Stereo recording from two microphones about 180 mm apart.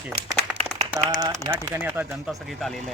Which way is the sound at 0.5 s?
35° right (ahead or behind).